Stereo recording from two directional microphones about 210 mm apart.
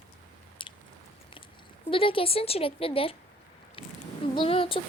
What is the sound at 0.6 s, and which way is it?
Chewing, 25° left (ahead or behind).